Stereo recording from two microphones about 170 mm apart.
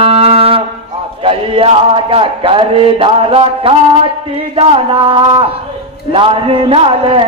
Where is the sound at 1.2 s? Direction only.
30° right (ahead or behind).